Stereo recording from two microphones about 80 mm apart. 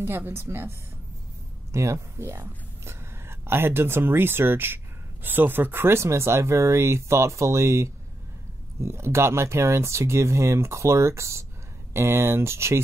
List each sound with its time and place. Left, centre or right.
0.0 s speech: right